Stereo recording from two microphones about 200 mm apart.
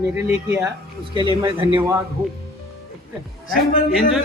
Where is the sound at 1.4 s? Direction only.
25° right (ahead or behind).